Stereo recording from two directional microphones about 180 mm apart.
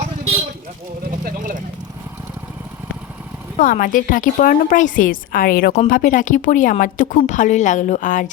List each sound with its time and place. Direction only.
1.2 s vehicle: 50° right (ahead or behind)
3.6 s speech: 50° left (ahead or behind)